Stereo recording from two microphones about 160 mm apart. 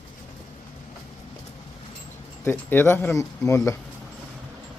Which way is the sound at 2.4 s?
15° left (ahead or behind).